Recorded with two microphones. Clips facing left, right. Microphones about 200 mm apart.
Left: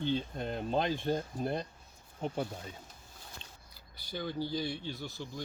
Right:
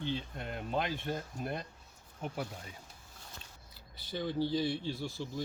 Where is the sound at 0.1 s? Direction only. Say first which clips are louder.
Left 5 dB; 30° left (ahead or behind).